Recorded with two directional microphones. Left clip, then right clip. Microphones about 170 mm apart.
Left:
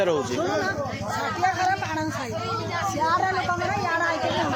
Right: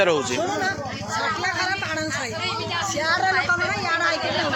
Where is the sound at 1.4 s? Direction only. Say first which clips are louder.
Left 2 dB; 65° left (ahead or behind).